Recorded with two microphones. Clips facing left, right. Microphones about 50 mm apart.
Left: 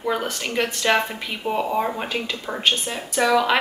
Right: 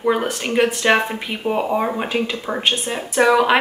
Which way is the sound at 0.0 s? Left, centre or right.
Right.